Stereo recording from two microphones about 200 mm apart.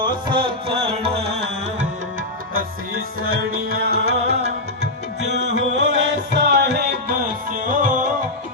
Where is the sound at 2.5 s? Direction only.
50° right (ahead or behind).